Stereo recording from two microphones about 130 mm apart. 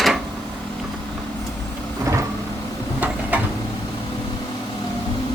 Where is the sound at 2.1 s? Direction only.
25° right (ahead or behind).